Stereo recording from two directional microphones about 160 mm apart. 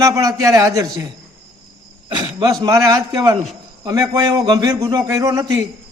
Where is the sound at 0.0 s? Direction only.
20° right (ahead or behind).